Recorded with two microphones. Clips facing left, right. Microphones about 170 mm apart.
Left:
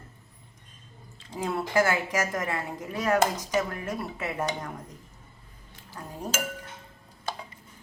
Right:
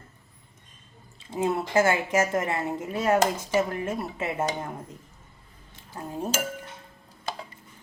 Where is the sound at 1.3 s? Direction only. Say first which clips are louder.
Right 3 dB; 25° right (ahead or behind).